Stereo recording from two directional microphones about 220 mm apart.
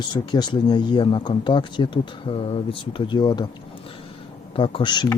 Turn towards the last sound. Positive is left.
turn(degrees=20)  # may be behind; listen again after turning